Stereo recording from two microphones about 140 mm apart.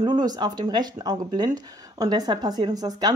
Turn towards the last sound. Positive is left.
turn(degrees=-30)  # may be behind; listen again after turning